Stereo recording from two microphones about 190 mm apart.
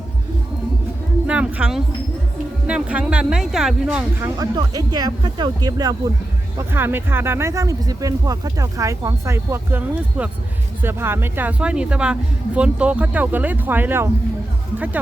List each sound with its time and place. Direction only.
1.3 s a sound: 5° right (ahead or behind)
2.6 s speech: 5° right (ahead or behind)
4.2 s speech: 20° right (ahead or behind)